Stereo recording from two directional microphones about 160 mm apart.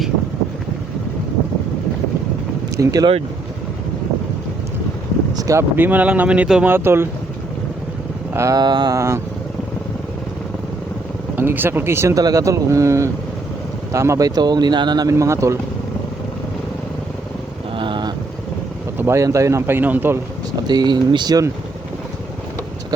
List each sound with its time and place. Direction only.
2.7 s speech: 20° right (ahead or behind)
5.4 s speech: 20° right (ahead or behind)
8.3 s speech: 20° right (ahead or behind)
11.3 s speech: 10° right (ahead or behind)
17.7 s vehicle: 30° right (ahead or behind)
18.9 s speech: 15° right (ahead or behind)
20.7 s speech: 25° right (ahead or behind)